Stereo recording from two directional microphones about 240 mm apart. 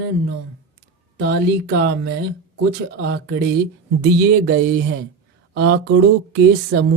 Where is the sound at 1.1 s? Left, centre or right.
Right.